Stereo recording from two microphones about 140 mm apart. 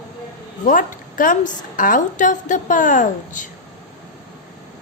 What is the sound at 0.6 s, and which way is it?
A woman's voice, 70° left (ahead or behind).